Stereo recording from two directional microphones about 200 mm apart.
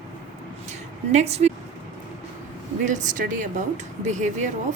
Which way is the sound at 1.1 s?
35° right (ahead or behind).